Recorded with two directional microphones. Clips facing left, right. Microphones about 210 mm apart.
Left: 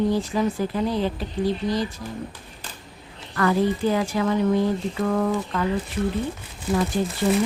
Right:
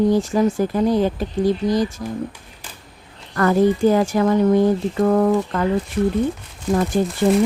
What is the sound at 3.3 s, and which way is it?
Speech, 45° right (ahead or behind).